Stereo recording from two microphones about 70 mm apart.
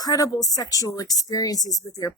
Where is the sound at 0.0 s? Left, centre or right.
Left.